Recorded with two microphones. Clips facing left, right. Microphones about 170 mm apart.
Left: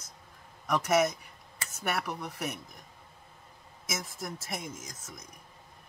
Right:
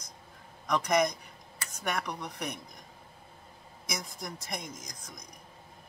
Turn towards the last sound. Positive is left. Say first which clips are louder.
# left 1 dB
turn(degrees=5)  # may be behind; listen again after turning